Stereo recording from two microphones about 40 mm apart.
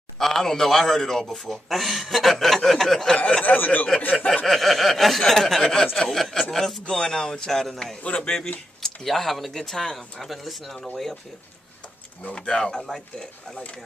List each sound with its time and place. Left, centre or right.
0.2 s a man's voice: centre
3.4 s speech: left
4.5 s chuckle: centre
6.5 s a man's voice: centre
8.2 s a man's voice: centre
8.8 s speech: centre
9.5 s chuckle: centre
12.4 s a man's voice: centre